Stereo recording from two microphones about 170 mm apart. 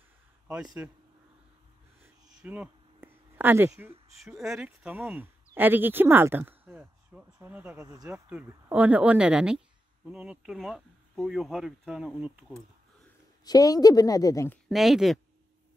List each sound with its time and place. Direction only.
0.8 s speech: 10° right (ahead or behind)
2.0 s a sound: 10° right (ahead or behind)
4.2 s speech: centre (ahead or behind)
7.8 s speech: 20° right (ahead or behind)
13.4 s a woman's voice: 20° left (ahead or behind)
14.7 s speech: centre (ahead or behind)